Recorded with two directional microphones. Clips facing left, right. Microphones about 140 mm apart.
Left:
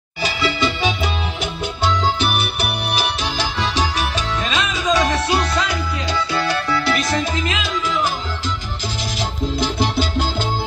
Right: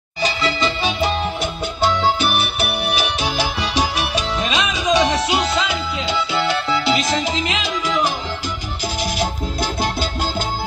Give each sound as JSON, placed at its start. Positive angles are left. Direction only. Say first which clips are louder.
{"t": 3.3, "sound": "music", "louder": "even", "side_deg": -10}